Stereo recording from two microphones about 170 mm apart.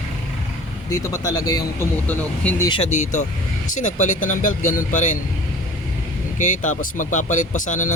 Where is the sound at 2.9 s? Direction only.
45° left (ahead or behind).